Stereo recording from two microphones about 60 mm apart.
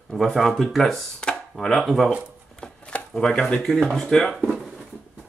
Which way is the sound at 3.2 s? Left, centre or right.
Centre.